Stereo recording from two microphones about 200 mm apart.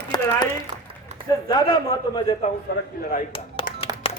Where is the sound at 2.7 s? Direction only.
55° left (ahead or behind).